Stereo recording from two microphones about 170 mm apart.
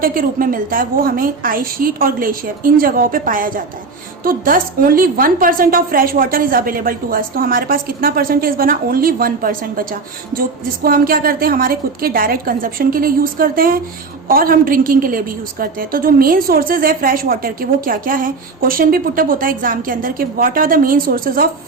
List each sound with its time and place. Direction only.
0.0 s a woman's voice: 55° right (ahead or behind)
10.8 s a woman's voice: 60° right (ahead or behind)